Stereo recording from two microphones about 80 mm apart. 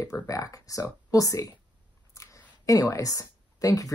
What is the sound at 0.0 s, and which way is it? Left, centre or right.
Speech, left.